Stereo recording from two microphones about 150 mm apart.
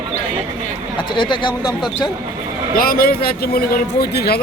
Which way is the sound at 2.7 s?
75° left (ahead or behind).